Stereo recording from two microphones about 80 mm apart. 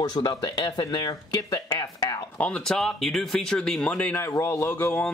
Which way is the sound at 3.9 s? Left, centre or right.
Left.